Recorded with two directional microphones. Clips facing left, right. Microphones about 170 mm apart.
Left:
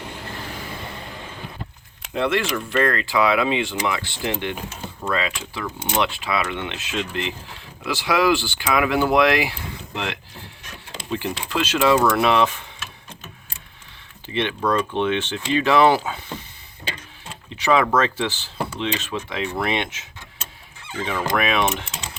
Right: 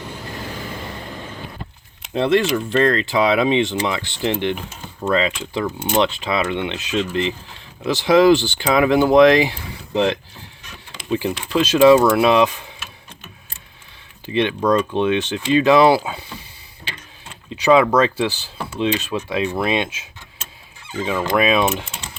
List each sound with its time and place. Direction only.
2.1 s speech: 20° right (ahead or behind)
14.3 s speech: 15° right (ahead or behind)
17.6 s speech: 15° right (ahead or behind)